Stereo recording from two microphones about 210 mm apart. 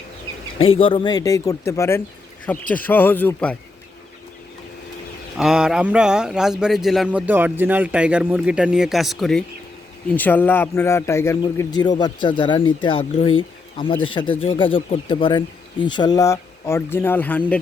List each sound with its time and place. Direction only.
0.6 s a man's voice: 25° left (ahead or behind); by 3.6 s 5° left (ahead or behind)
5.4 s a man's voice: 5° right (ahead or behind)